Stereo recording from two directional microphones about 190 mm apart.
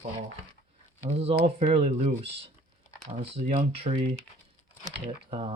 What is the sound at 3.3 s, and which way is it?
Speech, 30° right (ahead or behind).